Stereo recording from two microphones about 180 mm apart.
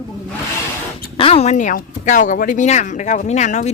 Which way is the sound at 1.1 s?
30° left (ahead or behind).